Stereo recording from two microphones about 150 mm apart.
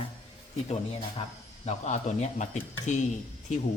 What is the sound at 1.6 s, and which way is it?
A man's voice, 50° left (ahead or behind).